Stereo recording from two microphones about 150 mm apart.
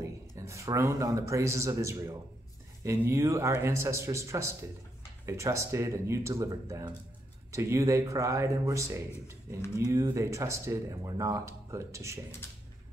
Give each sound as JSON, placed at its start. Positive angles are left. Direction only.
{"t": 0.4, "sound": "speech", "side_deg": -20}